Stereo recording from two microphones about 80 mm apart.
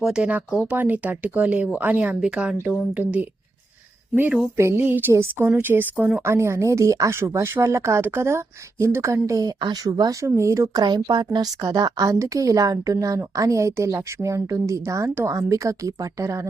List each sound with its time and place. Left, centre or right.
0.0 s speech: centre
4.5 s speech: right
5.1 s speech: right
5.5 s speech: right
6.2 s speech: right
10.8 s speech: right
11.6 s speech: right